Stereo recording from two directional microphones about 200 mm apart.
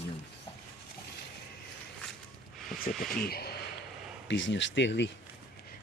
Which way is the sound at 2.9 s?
40° left (ahead or behind).